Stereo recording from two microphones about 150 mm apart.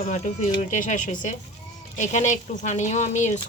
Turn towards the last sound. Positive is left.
turn(degrees=50)  # may be behind; listen again after turning